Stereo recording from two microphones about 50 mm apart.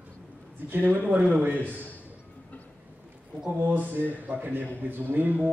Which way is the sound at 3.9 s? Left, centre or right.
Right.